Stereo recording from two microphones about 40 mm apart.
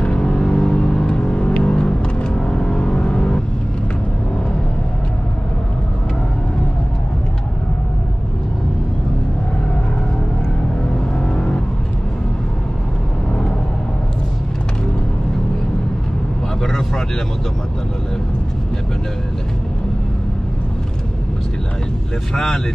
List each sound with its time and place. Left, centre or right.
0.0 s a sound: left
2.2 s vehicle: left
11.2 s vehicle: left
16.6 s vehicle: centre
22.3 s vehicle: centre